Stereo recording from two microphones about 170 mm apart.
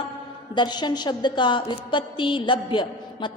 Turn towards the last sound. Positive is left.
turn(degrees=30)  # may be behind; listen again after turning